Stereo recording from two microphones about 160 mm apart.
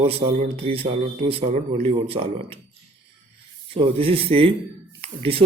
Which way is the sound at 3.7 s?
35° right (ahead or behind).